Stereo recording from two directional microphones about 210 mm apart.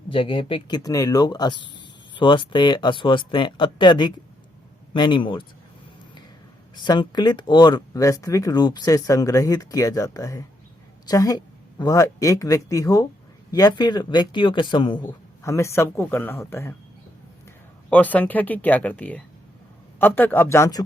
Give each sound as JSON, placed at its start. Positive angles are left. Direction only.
{"t": 0.1, "sound": "speech", "side_deg": 25}
{"t": 6.7, "sound": "speech", "side_deg": 20}
{"t": 17.9, "sound": "speech", "side_deg": 10}